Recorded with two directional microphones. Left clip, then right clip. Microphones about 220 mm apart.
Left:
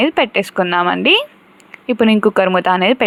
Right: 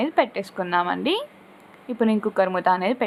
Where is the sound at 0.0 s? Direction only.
30° left (ahead or behind).